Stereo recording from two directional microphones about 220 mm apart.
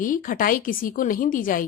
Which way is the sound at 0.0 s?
40° left (ahead or behind).